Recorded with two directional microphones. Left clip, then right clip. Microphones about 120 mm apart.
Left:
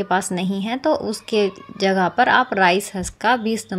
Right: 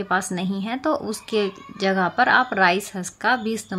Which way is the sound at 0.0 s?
20° left (ahead or behind).